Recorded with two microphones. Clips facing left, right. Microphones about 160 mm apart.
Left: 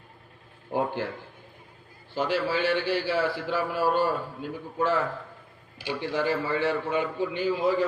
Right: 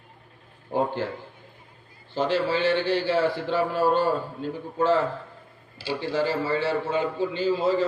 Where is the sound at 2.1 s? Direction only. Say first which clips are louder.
Right 3 dB; 10° left (ahead or behind).